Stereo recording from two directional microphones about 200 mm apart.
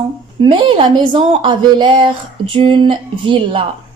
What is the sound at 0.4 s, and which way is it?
A woman's voice, 25° right (ahead or behind).